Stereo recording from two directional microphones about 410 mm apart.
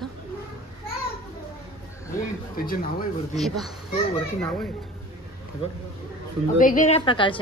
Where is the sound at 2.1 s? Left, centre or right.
Left.